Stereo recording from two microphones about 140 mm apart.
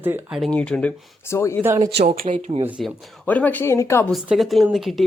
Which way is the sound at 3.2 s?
10° left (ahead or behind).